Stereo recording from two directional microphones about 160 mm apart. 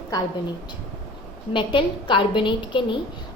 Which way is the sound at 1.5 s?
30° left (ahead or behind).